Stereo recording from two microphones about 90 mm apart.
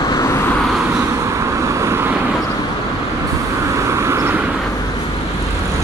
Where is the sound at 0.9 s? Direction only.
35° right (ahead or behind).